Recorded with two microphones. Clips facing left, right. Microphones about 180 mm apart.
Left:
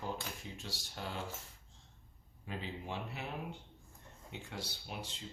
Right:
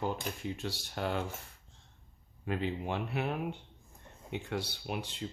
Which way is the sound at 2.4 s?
65° right (ahead or behind).